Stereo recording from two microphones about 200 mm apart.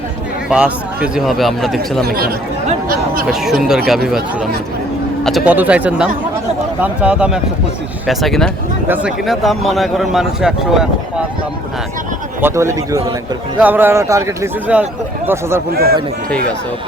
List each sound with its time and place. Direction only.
0.5 s a man's voice: 5° right (ahead or behind)
2.0 s a man's voice: 50° right (ahead or behind)
3.4 s a man's voice: centre (ahead or behind)
5.2 s a man's voice: 5° right (ahead or behind)
12.4 s speech: 15° right (ahead or behind)
15.7 s a man's voice: 50° right (ahead or behind)